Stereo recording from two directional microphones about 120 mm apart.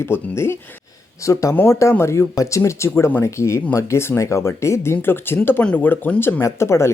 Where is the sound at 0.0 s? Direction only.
20° left (ahead or behind).